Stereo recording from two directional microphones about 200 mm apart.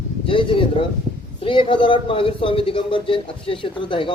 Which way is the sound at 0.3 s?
25° left (ahead or behind).